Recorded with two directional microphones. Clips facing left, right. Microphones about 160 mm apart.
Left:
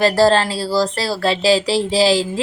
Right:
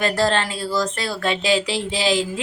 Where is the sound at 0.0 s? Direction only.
35° left (ahead or behind).